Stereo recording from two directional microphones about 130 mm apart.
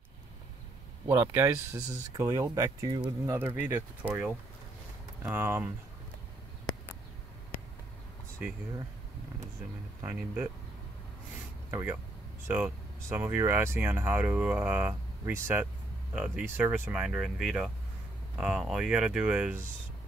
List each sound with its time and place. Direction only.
1.0 s speech: 15° right (ahead or behind)
5.3 s speech: 15° right (ahead or behind)
8.4 s speech: 10° right (ahead or behind)
10.0 s speech: 15° right (ahead or behind)
11.7 s speech: 15° right (ahead or behind)